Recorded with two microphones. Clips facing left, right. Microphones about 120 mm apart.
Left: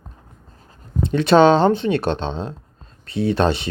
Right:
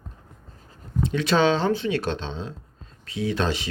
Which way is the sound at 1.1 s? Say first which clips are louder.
Left 8 dB; 60° left (ahead or behind).